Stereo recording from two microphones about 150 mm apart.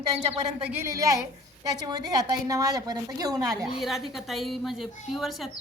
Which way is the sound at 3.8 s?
Centre (ahead or behind).